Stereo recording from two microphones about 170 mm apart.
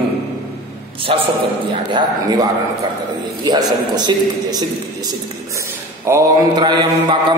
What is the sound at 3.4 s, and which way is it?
A man's voice, 25° right (ahead or behind).